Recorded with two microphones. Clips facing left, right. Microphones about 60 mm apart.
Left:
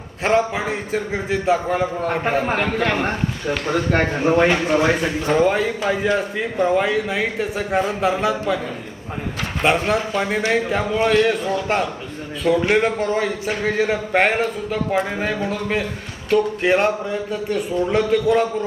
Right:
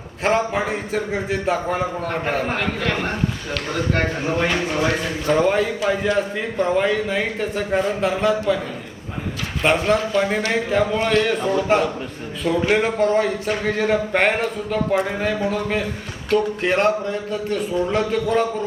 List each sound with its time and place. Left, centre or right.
0.2 s a man's voice: centre
4.4 s a man's voice: left
5.4 s a man's voice: centre
9.9 s a man's voice: centre